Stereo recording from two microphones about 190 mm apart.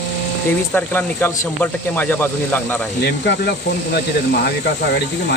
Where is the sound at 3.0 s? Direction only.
60° left (ahead or behind).